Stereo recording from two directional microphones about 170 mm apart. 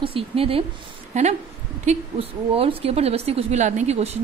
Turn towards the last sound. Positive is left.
turn(degrees=-45)  # may be behind; listen again after turning